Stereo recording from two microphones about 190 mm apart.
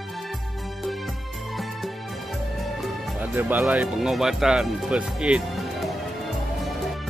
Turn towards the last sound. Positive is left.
turn(degrees=0)  # may be behind; listen again after turning